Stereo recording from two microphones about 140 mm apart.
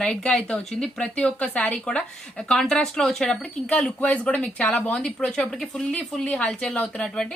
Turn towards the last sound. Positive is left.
turn(degrees=5)  # may be behind; listen again after turning